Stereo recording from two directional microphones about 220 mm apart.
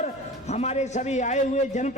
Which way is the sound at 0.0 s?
30° left (ahead or behind).